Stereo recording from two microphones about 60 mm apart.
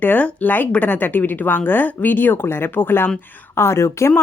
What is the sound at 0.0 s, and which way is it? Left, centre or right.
Speech, left.